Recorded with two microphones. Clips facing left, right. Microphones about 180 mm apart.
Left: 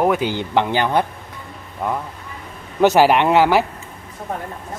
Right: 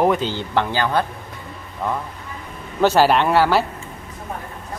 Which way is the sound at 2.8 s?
15° left (ahead or behind).